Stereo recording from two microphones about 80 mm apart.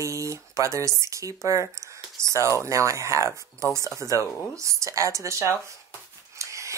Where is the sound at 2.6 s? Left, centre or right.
Right.